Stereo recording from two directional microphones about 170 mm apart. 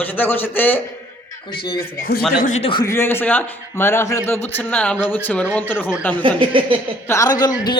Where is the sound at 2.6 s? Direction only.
30° left (ahead or behind).